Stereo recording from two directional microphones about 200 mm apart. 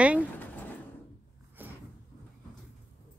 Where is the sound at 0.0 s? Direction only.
5° right (ahead or behind).